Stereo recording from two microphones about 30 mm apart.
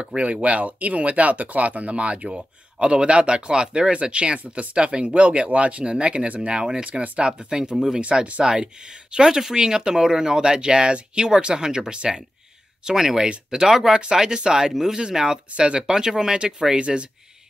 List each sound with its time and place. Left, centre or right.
0.2 s speech: right
7.2 s speech: right
9.1 s speech: right
15.5 s speech: right
15.9 s speech: right
16.7 s speech: right